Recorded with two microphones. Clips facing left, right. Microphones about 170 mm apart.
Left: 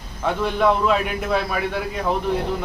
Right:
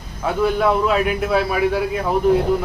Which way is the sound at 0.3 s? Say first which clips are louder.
Right 2 dB; 5° right (ahead or behind).